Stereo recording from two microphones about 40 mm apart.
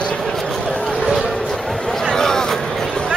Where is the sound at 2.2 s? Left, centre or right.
Centre.